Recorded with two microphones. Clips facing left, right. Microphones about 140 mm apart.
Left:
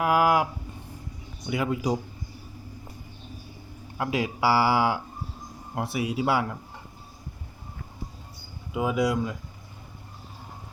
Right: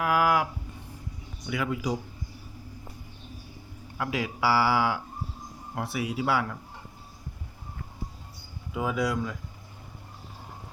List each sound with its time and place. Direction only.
0.0 s a sound: 20° left (ahead or behind)
1.5 s a man's voice: 25° left (ahead or behind)
3.9 s a man's voice: 25° left (ahead or behind)
8.7 s speech: 15° left (ahead or behind)